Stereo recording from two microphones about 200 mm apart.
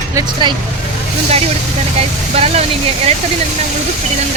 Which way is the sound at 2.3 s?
30° right (ahead or behind).